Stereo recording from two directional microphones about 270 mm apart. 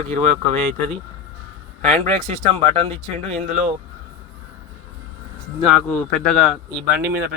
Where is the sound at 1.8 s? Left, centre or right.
Right.